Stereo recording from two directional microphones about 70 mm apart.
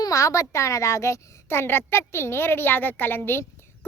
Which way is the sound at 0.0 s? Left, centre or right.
Left.